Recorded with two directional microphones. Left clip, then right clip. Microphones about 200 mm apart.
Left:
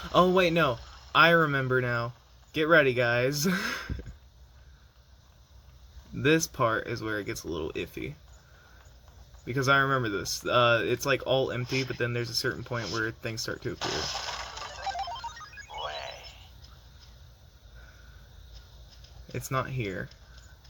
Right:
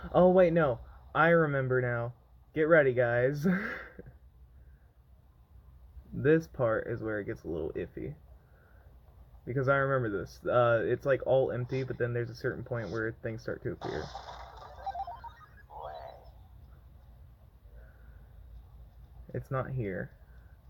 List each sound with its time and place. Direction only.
0.0 s speech: 25° left (ahead or behind)
6.1 s speech: 20° left (ahead or behind)
9.6 s speech: 20° left (ahead or behind)
13.7 s a sound: 30° left (ahead or behind)
19.3 s speech: 20° left (ahead or behind)